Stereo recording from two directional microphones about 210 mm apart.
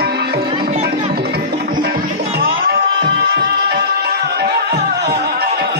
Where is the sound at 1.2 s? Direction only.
50° right (ahead or behind).